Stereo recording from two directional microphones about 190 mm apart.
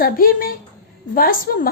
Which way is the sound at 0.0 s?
50° left (ahead or behind).